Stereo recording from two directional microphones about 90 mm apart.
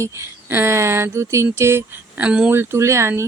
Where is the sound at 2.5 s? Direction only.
25° right (ahead or behind).